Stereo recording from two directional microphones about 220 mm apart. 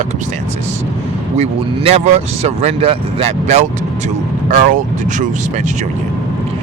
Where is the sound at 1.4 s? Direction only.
30° right (ahead or behind).